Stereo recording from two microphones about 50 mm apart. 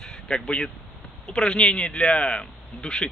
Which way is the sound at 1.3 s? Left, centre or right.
Centre.